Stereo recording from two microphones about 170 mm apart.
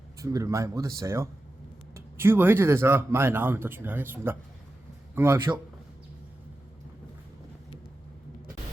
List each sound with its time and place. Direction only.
0.2 s speech: 20° right (ahead or behind)